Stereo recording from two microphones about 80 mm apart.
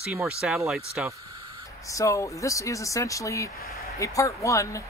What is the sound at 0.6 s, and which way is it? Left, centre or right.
Speech, centre.